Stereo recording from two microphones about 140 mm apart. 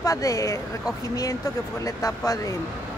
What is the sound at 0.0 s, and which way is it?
Speech, 25° left (ahead or behind).